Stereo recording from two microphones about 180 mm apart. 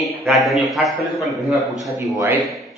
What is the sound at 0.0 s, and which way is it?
A man's voice, centre (ahead or behind).